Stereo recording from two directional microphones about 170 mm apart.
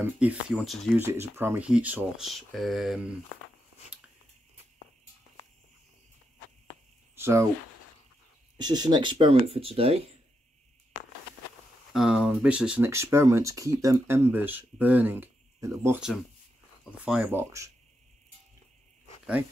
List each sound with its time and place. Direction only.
0.0 s speech: 10° right (ahead or behind)
7.2 s speech: 15° right (ahead or behind)
8.5 s speech: 25° right (ahead or behind)
11.9 s speech: 5° right (ahead or behind)
17.0 s speech: 10° right (ahead or behind)